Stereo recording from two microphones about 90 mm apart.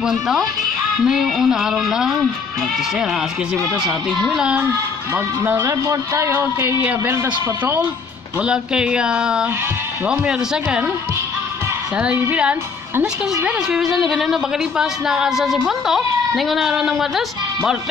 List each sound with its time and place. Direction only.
0.0 s a woman's voice: 5° right (ahead or behind)
4.4 s speech: 10° right (ahead or behind)
5.1 s a man's voice: 25° right (ahead or behind)
5.7 s a man's voice: 35° right (ahead or behind); by 10.9 s 10° right (ahead or behind)
12.2 s a woman's voice: 15° right (ahead or behind)